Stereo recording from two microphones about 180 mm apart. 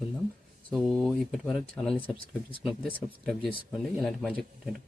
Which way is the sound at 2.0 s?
30° left (ahead or behind).